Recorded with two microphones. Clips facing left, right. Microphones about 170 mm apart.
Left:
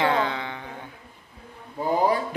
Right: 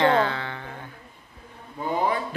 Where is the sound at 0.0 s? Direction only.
15° left (ahead or behind).